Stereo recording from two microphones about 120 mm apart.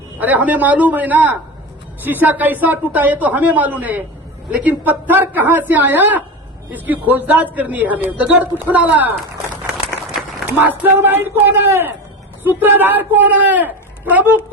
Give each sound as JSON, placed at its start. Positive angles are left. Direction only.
{"t": 0.2, "sound": "a man's voice", "side_deg": -15}